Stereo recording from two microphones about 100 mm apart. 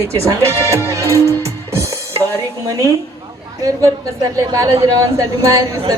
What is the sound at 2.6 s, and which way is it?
Speech, 30° right (ahead or behind).